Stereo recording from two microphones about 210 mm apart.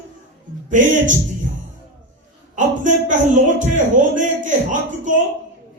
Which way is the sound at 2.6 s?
35° right (ahead or behind).